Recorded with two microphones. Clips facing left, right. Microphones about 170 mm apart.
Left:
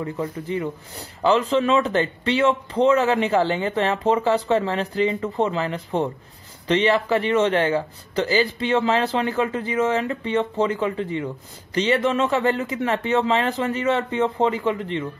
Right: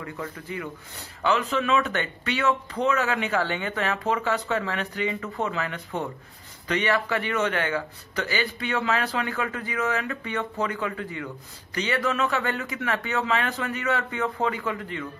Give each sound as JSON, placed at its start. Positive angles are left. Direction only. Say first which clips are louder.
{"t": 0.0, "sound": "a man's voice", "louder": "left 8 dB", "side_deg": 25}